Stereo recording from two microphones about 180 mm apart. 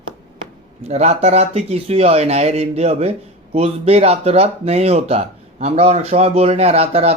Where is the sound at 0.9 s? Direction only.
35° right (ahead or behind).